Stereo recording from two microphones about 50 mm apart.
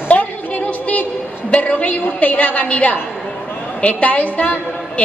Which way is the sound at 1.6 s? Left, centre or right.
Left.